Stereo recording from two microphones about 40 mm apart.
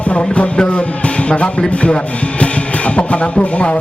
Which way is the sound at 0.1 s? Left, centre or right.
Left.